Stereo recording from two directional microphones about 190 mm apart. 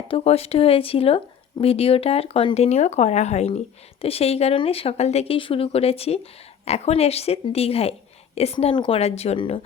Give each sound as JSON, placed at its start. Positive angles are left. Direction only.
{"t": 0.1, "sound": "speech", "side_deg": 30}